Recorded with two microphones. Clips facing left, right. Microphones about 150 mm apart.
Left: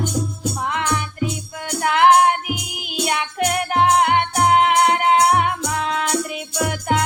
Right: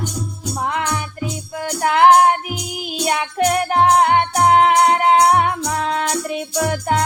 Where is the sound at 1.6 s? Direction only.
35° right (ahead or behind).